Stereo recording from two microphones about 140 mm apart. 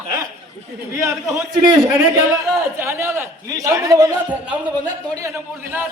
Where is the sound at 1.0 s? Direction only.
25° right (ahead or behind).